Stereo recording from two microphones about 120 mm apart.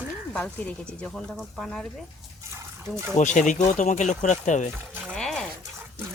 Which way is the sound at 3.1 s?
85° left.